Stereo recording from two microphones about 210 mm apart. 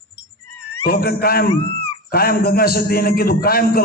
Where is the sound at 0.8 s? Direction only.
45° left (ahead or behind).